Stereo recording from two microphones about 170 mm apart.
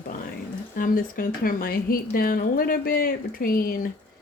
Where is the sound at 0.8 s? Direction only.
55° left (ahead or behind).